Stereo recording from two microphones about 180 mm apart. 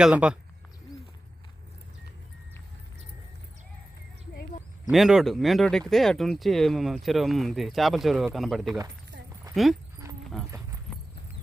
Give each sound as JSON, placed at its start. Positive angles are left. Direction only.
{"t": 0.0, "sound": "speech", "side_deg": -5}
{"t": 4.9, "sound": "speech", "side_deg": 0}